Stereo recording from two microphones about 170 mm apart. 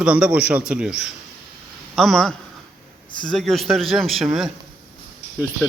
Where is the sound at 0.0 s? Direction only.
5° right (ahead or behind).